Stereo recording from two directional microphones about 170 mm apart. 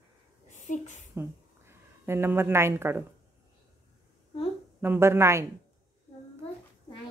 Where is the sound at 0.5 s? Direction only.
45° left (ahead or behind).